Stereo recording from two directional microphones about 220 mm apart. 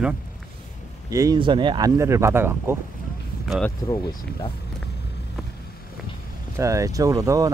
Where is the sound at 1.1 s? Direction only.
15° right (ahead or behind).